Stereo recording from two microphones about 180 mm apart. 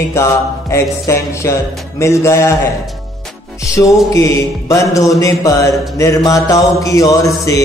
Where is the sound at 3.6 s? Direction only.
15° left (ahead or behind).